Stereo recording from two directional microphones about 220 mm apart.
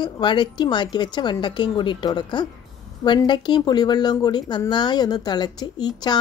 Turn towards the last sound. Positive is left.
turn(degrees=20)  # may be behind; listen again after turning